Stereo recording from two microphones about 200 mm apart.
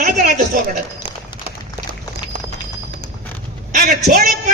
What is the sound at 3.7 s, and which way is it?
Speech, 40° right (ahead or behind).